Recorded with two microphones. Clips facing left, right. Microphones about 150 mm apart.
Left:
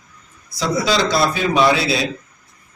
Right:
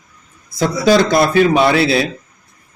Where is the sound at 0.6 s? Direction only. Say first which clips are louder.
Right 6 dB; 55° right (ahead or behind).